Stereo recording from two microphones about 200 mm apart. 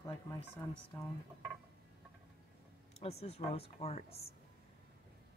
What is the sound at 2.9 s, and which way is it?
Speech, 30° left (ahead or behind).